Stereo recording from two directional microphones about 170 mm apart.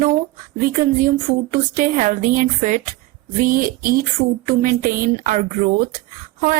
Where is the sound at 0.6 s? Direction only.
50° right (ahead or behind).